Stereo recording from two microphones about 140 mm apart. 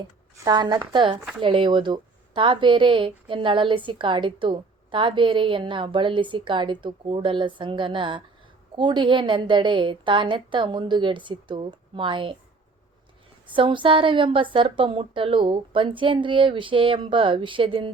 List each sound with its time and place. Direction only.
0.4 s speech: 30° right (ahead or behind)
13.5 s speech: 35° right (ahead or behind)